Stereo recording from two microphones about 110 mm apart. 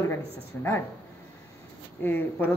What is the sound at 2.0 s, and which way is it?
Speech, 15° left (ahead or behind).